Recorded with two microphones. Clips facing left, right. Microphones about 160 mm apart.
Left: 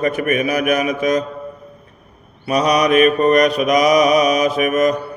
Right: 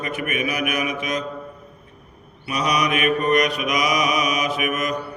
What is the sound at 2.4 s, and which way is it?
Mantra, 35° left (ahead or behind).